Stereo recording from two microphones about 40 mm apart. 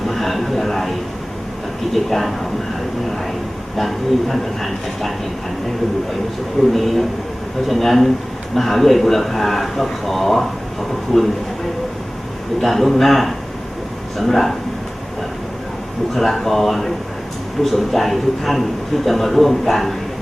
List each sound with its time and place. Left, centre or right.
0.1 s speech: centre
3.8 s speech: centre
6.7 s speech: centre
12.5 s speech: centre
16.1 s speech: centre